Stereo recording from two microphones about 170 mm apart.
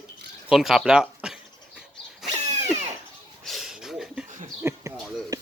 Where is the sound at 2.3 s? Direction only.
40° right (ahead or behind).